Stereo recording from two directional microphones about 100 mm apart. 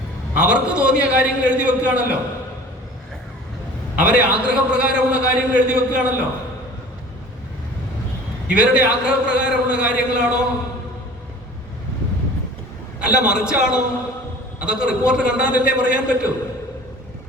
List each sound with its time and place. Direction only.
0.3 s a man's voice: 10° right (ahead or behind)
4.0 s a man's voice: 10° right (ahead or behind)
8.5 s a man's voice: 10° right (ahead or behind)
13.0 s a man's voice: 10° right (ahead or behind)